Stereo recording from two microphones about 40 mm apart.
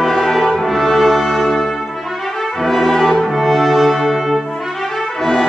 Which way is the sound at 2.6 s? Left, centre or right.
Centre.